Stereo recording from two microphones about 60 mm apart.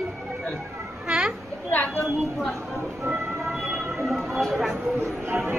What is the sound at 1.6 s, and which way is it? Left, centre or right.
Speech, left.